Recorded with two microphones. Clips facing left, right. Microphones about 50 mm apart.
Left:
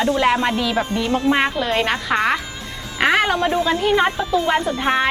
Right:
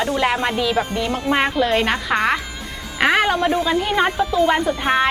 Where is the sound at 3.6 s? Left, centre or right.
Centre.